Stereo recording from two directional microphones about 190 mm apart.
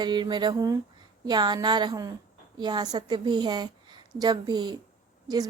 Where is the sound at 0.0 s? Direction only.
25° right (ahead or behind).